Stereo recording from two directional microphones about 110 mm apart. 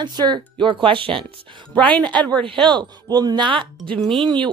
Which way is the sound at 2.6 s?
45° right (ahead or behind).